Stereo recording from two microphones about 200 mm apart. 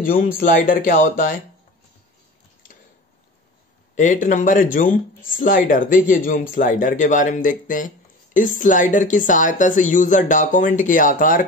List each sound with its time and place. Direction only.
0.0 s speech: 45° left (ahead or behind)
3.9 s speech: 40° left (ahead or behind)